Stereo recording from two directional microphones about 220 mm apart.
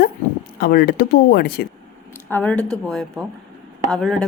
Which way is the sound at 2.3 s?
5° left (ahead or behind).